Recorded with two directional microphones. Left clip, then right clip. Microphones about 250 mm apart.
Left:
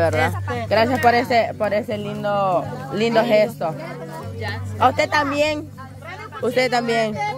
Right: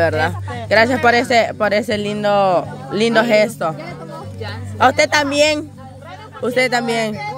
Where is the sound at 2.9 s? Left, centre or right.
Centre.